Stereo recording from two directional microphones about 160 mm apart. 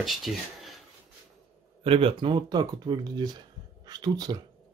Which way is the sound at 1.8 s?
35° right (ahead or behind).